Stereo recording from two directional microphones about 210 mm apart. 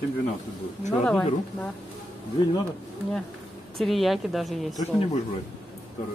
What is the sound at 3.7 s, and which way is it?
A woman's voice, centre (ahead or behind).